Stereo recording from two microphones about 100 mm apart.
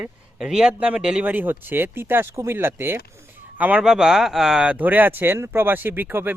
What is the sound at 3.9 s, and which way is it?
Speech, 5° right (ahead or behind).